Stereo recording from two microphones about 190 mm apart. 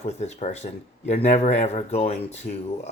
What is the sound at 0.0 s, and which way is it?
Speech, 35° left (ahead or behind).